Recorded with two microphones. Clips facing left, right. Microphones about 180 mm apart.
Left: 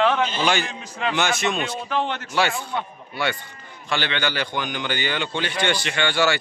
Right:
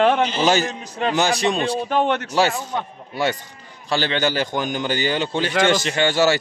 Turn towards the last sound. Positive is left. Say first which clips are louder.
# right 4 dB
turn(degrees=-40)  # may be behind; listen again after turning